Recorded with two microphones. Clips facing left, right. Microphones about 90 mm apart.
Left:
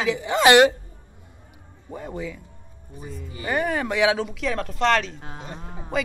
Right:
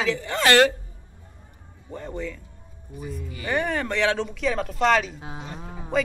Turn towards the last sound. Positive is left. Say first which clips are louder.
# right 2 dB
turn(degrees=0)  # may be behind; listen again after turning